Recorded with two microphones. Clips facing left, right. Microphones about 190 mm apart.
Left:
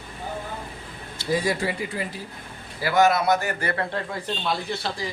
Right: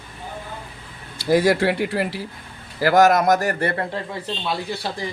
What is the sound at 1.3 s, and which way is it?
Speech, 75° right (ahead or behind).